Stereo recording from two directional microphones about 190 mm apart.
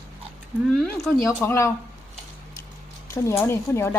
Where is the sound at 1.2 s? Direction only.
15° left (ahead or behind).